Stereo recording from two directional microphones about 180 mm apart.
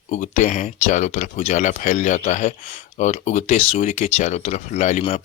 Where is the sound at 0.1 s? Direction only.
40° left (ahead or behind).